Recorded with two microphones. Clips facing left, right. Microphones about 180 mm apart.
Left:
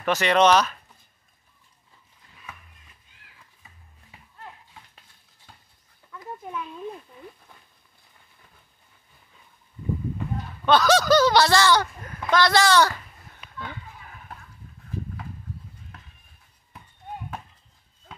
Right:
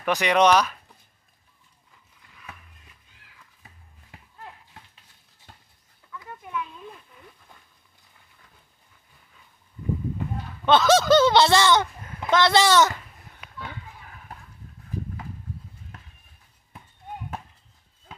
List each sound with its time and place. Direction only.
0.0 s speech: 15° right (ahead or behind)
6.1 s a sound: 30° left (ahead or behind)
10.6 s speech: 25° right (ahead or behind)